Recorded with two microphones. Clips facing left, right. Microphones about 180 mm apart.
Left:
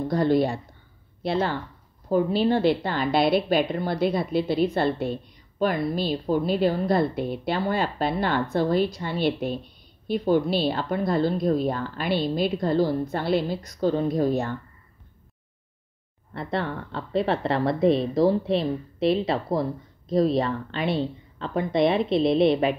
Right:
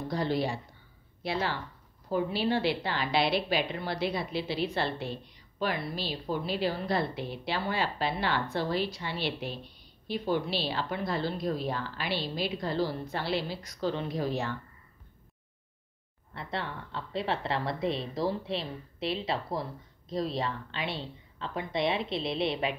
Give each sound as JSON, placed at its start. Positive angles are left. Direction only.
{"t": 0.1, "sound": "a woman's voice", "side_deg": 50}
{"t": 16.3, "sound": "a woman's voice", "side_deg": 50}